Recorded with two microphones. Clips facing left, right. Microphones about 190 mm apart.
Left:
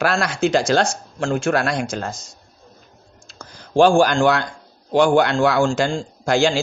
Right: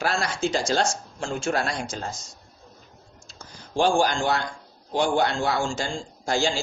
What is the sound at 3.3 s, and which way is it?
A man's voice, 75° left (ahead or behind).